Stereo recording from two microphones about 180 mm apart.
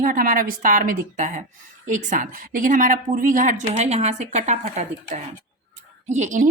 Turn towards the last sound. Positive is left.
turn(degrees=-45)  # may be behind; listen again after turning